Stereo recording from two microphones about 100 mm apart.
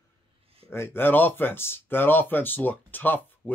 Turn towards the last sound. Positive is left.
turn(degrees=20)  # may be behind; listen again after turning